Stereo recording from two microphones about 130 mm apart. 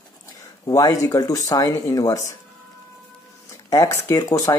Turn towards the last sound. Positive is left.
turn(degrees=25)  # may be behind; listen again after turning